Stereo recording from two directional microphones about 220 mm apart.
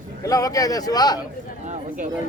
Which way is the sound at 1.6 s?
35° right (ahead or behind).